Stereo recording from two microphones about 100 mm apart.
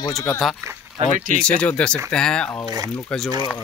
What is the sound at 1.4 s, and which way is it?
A man's voice, 10° left (ahead or behind).